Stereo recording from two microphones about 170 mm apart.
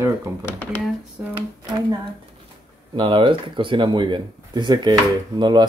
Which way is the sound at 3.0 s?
30° right (ahead or behind).